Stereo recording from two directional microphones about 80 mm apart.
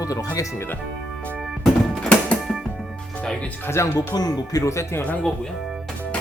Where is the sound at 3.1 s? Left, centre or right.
Centre.